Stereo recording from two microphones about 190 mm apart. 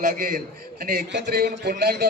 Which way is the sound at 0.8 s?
60° right (ahead or behind).